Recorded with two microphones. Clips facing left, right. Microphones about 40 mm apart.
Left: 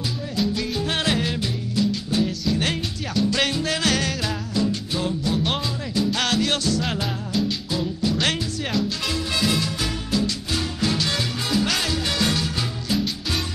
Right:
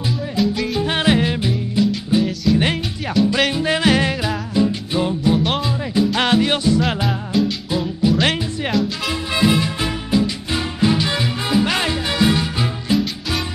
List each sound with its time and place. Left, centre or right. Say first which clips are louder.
0.4 s music: right 4 dB; centre
0.7 s music: right 7 dB; right
5.4 s music: right 4 dB; centre
6.1 s music: right 6 dB; right
12.9 s music: right 4 dB; centre